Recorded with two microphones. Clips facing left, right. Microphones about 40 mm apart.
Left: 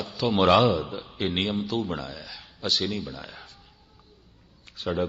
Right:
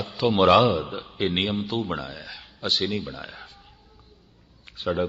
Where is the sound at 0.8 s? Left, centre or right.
Right.